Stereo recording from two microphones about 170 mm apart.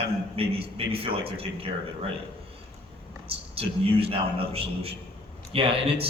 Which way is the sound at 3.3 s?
35° right (ahead or behind).